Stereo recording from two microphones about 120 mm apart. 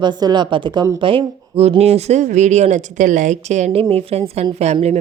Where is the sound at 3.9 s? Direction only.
55° right (ahead or behind).